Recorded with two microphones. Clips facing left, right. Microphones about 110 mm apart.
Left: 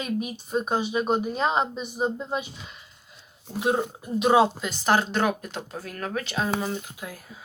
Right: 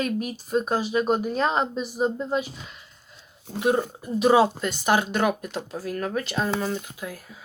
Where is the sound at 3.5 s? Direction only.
10° left (ahead or behind).